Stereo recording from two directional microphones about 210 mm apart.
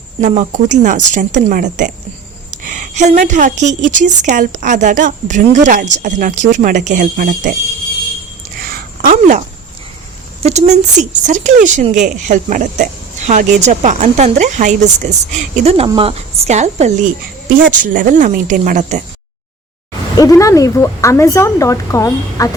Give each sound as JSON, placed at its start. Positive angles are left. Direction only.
{"t": 0.2, "sound": "a woman's voice", "side_deg": -35}
{"t": 8.5, "sound": "a sound", "side_deg": -45}
{"t": 10.4, "sound": "a woman's voice", "side_deg": -35}
{"t": 20.1, "sound": "a woman's voice", "side_deg": 15}